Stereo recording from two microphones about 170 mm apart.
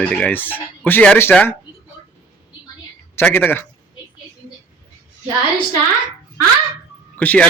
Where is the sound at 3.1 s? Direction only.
10° left (ahead or behind).